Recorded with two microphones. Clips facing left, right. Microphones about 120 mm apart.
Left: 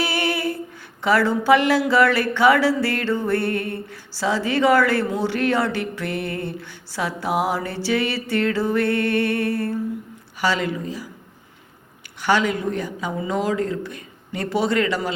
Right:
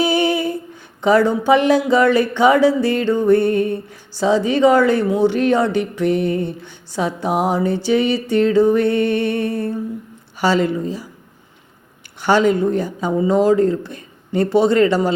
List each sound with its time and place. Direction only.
0.0 s a sound: 20° right (ahead or behind)
1.0 s speech: 20° right (ahead or behind)
10.4 s speech: 30° right (ahead or behind)
12.2 s speech: 30° right (ahead or behind)